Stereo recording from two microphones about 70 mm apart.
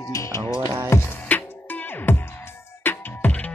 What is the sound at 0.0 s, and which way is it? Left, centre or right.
Music, left.